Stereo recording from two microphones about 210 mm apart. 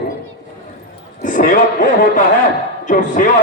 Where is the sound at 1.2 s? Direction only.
40° left (ahead or behind).